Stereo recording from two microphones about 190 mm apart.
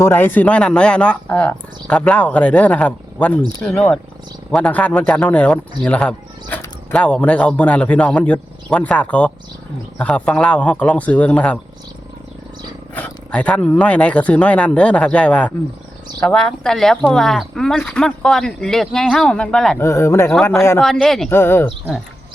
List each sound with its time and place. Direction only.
0.0 s speech: 10° left (ahead or behind)
4.5 s speech: 5° left (ahead or behind)
12.9 s speech: 10° left (ahead or behind)
20.8 s speech: centre (ahead or behind)